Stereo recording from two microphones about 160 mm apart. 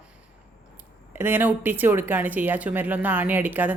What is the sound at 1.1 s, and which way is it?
Speech, 10° right (ahead or behind).